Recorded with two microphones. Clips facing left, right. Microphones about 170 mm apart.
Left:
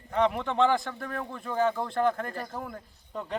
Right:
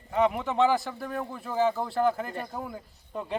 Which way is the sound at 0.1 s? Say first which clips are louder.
Right 1 dB; 5° right (ahead or behind).